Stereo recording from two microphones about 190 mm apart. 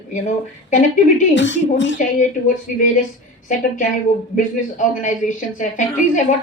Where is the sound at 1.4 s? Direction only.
70° left (ahead or behind).